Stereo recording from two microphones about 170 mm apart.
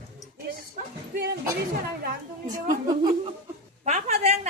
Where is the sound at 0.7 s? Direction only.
60° right (ahead or behind).